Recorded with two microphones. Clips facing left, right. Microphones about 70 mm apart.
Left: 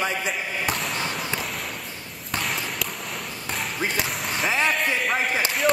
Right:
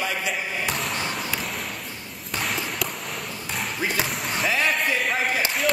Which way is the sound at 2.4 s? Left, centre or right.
Centre.